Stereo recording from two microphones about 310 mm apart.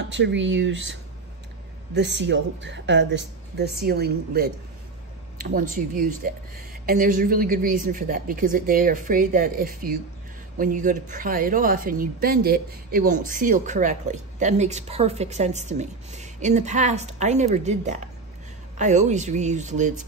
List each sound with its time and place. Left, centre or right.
0.0 s speech: right
2.0 s speech: right